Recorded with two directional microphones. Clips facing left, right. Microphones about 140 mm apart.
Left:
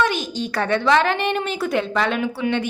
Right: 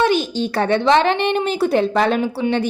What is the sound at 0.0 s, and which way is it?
A woman's voice, 30° right (ahead or behind).